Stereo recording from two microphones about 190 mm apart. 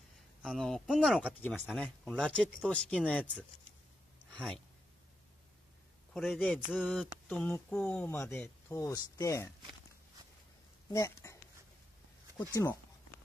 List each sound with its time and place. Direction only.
0.4 s speech: centre (ahead or behind)
4.3 s a sound: 5° left (ahead or behind)
6.1 s speech: centre (ahead or behind)
7.2 s speech: 10° left (ahead or behind)
10.9 s speech: 15° left (ahead or behind)
12.6 s speech: 10° left (ahead or behind)